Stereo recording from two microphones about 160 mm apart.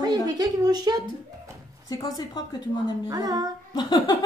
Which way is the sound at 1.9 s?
25° left (ahead or behind).